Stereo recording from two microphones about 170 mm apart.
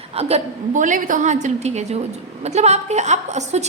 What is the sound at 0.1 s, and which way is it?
A woman's voice, 35° right (ahead or behind).